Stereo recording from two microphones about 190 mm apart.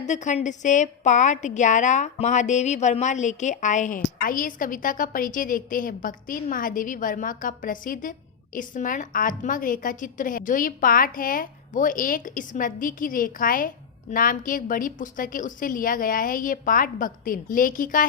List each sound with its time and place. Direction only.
0.0 s a woman's voice: 40° left (ahead or behind)